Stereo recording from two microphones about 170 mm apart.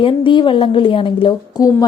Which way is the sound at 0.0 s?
30° left (ahead or behind).